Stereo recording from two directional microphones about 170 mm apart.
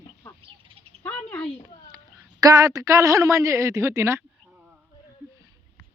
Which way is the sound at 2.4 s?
20° right (ahead or behind).